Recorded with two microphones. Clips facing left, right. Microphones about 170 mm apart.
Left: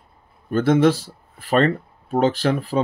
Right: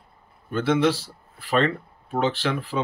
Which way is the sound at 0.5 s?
45° left (ahead or behind).